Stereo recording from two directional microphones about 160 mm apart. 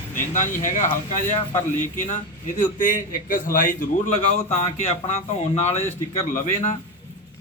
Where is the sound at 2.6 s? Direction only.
50° left (ahead or behind).